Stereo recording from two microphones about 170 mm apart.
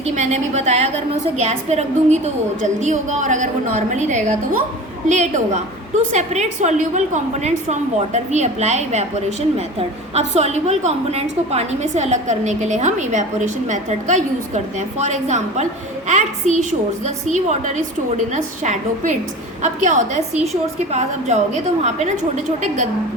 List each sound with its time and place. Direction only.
0.0 s a woman's voice: 40° right (ahead or behind)
10.2 s a woman's voice: 40° right (ahead or behind)